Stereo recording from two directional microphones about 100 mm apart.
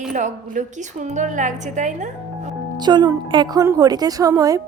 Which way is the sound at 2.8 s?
45° right (ahead or behind).